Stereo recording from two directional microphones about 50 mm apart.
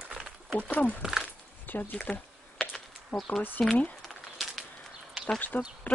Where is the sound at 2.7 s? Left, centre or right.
Centre.